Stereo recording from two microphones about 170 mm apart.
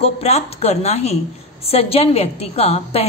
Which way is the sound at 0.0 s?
35° left (ahead or behind).